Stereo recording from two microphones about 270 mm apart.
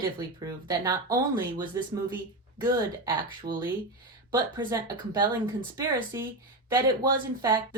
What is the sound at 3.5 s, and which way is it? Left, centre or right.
Speech, centre.